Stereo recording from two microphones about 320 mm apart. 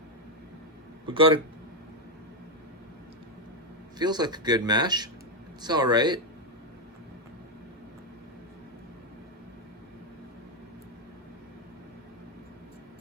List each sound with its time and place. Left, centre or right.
1.0 s speech: centre
3.9 s speech: centre